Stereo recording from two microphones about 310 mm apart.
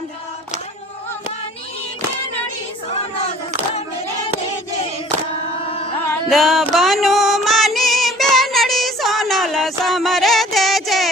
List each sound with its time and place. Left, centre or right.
5.6 s carnatic music: centre
6.1 s female singing: centre